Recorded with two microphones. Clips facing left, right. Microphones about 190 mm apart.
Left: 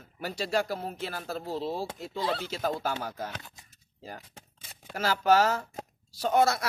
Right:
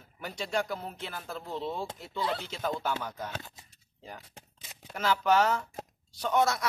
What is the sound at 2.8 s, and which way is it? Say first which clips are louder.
Speech: left 1 dB; 40° left (ahead or behind).